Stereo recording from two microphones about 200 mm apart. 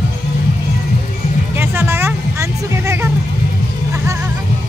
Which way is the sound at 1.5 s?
10° right (ahead or behind).